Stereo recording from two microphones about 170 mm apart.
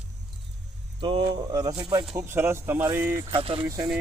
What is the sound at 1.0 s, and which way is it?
Speech, 25° right (ahead or behind).